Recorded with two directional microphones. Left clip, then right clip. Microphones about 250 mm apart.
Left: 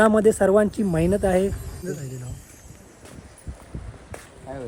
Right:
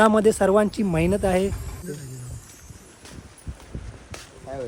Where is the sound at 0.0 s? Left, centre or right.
Centre.